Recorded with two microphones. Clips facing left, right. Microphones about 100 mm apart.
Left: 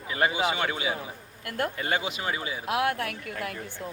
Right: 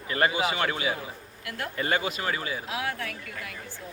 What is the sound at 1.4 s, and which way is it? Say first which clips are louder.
Speech: left 5 dB; 45° left (ahead or behind).